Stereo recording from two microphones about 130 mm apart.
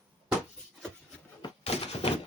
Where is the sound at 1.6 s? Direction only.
50° left (ahead or behind).